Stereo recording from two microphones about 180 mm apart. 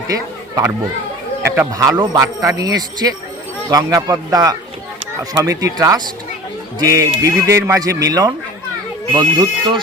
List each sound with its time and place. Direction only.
0.1 s a man's voice: 20° right (ahead or behind)